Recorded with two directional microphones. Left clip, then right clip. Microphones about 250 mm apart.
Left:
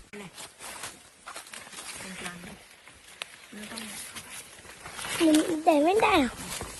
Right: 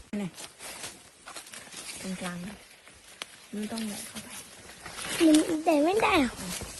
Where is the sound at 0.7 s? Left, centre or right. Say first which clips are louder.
Left 1 dB; centre.